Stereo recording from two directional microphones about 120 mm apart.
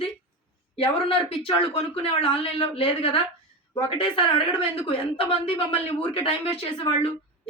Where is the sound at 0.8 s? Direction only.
50° left (ahead or behind).